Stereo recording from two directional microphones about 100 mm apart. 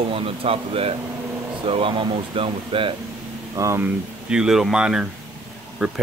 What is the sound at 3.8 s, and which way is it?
Speech, 10° right (ahead or behind).